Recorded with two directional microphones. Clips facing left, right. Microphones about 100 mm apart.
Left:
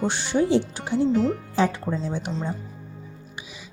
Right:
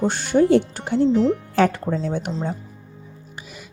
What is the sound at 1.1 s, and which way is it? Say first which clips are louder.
Speech: right 4 dB; 25° right (ahead or behind).